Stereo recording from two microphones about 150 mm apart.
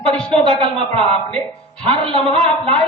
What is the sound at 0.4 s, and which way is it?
A woman's voice, 40° right (ahead or behind).